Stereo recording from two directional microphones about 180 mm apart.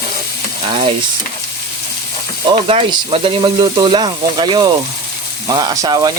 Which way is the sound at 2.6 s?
30° right (ahead or behind).